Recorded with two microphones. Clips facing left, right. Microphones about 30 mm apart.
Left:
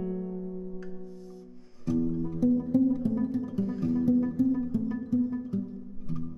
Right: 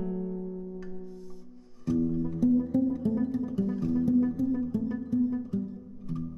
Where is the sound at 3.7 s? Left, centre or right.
Left.